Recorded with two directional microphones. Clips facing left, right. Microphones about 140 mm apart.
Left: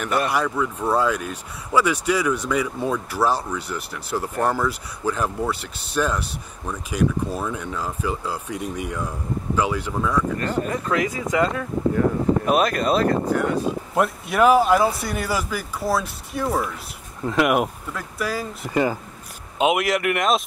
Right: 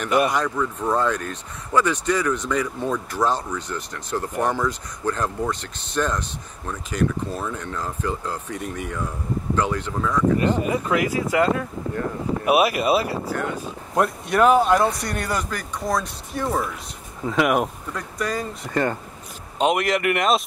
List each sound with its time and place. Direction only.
0.3 s speech: 10° left (ahead or behind)
10.3 s speech: 10° right (ahead or behind)
13.2 s speech: 15° left (ahead or behind)
13.9 s speech: centre (ahead or behind)